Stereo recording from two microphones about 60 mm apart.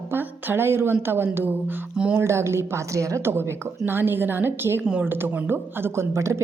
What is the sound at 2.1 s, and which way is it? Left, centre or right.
A woman's voice, right.